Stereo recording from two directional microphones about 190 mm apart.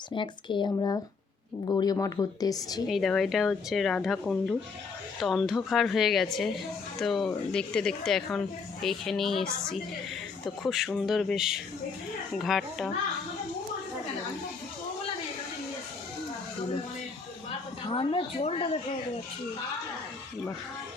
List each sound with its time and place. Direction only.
0.1 s speech: 25° left (ahead or behind)
2.9 s speech: centre (ahead or behind)
17.9 s speech: 25° left (ahead or behind)